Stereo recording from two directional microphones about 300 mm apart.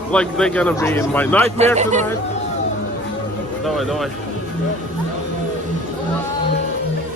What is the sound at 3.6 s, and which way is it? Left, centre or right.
Speech, centre.